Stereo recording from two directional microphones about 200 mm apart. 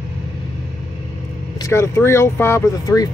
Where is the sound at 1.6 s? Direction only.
15° left (ahead or behind).